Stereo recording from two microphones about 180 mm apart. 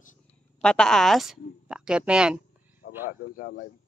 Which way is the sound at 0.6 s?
5° left (ahead or behind).